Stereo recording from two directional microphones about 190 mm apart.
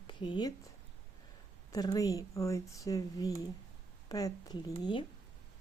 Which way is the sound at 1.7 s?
20° left (ahead or behind).